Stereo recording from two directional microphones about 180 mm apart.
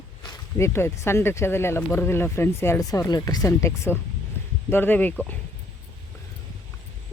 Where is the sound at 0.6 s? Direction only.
15° left (ahead or behind).